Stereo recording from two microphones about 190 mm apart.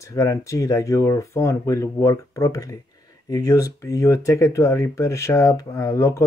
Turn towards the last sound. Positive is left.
turn(degrees=15)  # may be behind; listen again after turning